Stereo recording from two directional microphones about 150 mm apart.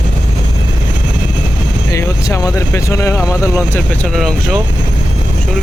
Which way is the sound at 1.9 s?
20° left (ahead or behind).